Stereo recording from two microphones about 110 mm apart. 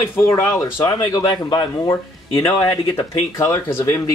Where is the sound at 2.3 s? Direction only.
20° left (ahead or behind).